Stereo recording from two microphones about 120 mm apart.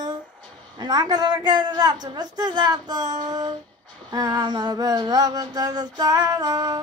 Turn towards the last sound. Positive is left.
turn(degrees=-35)  # may be behind; listen again after turning